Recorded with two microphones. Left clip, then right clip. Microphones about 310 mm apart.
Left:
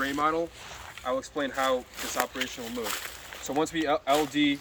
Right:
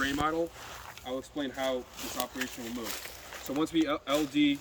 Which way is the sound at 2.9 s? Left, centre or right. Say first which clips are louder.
Left 6 dB; centre.